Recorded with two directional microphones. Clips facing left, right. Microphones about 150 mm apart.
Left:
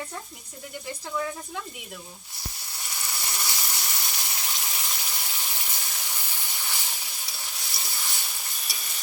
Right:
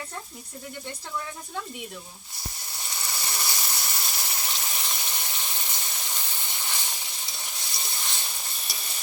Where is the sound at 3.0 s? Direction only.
15° right (ahead or behind).